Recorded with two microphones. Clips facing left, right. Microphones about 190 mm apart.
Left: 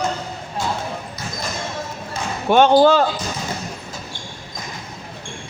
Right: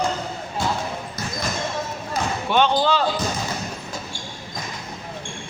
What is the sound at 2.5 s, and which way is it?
Speech, 45° left (ahead or behind).